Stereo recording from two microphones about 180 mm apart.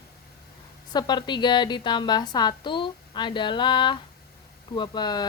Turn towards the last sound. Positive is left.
turn(degrees=25)  # may be behind; listen again after turning